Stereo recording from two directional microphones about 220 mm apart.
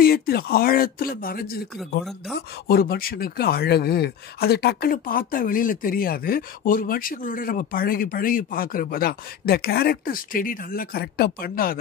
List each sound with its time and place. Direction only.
0.0 s speech: 45° left (ahead or behind)
2.7 s speech: 40° left (ahead or behind)